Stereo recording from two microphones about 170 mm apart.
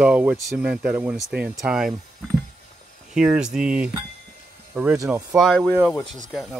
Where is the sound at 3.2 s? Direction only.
5° right (ahead or behind).